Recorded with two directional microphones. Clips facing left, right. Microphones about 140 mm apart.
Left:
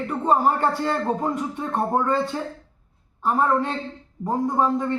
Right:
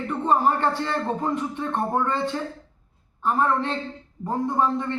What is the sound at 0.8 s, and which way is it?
Speech, 10° left (ahead or behind).